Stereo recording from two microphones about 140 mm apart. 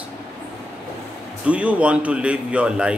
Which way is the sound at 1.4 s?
10° right (ahead or behind).